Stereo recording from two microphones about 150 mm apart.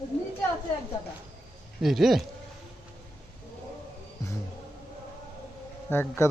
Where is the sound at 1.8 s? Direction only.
Centre (ahead or behind).